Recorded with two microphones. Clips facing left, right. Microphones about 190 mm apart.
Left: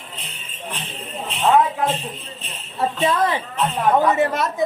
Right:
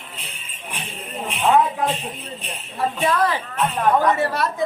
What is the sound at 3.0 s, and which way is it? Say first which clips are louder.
Speech: left 1 dB; 20° left (ahead or behind).